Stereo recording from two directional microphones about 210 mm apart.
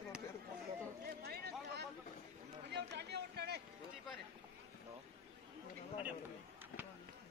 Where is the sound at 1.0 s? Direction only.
50° right (ahead or behind).